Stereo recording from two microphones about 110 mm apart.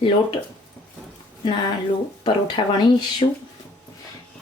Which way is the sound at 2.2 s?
45° left (ahead or behind).